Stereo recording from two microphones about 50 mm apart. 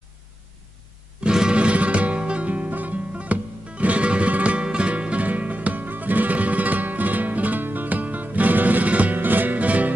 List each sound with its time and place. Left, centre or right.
1.2 s music: centre; by 9.9 s right